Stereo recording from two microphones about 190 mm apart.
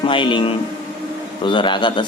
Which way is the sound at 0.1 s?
25° left (ahead or behind).